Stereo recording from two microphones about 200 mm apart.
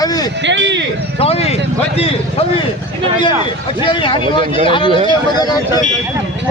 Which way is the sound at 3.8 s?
25° left (ahead or behind).